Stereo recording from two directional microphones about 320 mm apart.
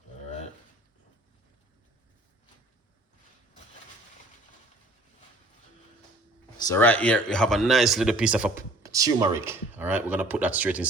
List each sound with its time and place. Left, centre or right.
6.7 s speech: centre